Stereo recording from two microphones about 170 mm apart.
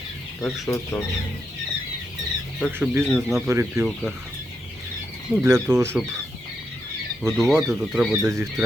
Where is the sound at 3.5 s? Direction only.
15° right (ahead or behind).